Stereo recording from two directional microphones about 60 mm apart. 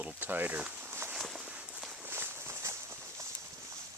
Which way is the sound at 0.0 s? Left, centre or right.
Right.